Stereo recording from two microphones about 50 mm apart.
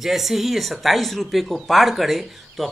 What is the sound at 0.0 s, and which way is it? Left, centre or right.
Speech, centre.